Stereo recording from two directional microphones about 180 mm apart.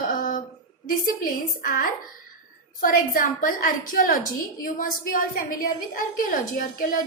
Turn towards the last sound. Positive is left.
turn(degrees=50)  # may be behind; listen again after turning